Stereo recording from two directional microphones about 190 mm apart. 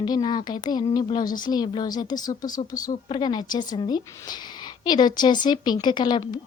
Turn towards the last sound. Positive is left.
turn(degrees=25)  # may be behind; listen again after turning